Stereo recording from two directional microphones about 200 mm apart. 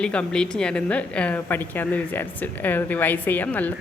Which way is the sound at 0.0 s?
5° left (ahead or behind).